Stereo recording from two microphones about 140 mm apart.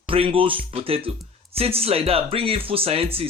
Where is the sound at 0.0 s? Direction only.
40° right (ahead or behind).